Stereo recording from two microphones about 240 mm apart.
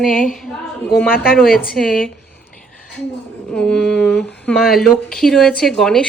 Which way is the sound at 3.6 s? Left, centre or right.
Centre.